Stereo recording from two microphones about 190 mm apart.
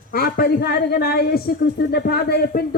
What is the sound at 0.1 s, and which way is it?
A woman's voice, 55° left (ahead or behind).